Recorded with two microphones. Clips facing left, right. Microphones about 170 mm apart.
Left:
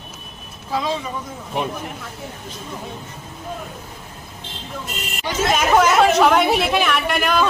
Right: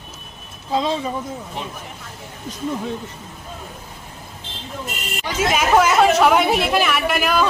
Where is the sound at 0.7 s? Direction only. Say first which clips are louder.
Right 3 dB; 20° right (ahead or behind).